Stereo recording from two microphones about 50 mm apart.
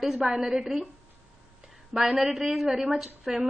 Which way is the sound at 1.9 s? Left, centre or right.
Centre.